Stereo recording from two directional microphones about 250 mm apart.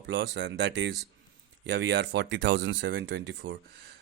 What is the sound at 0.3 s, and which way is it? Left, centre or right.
Speech, right.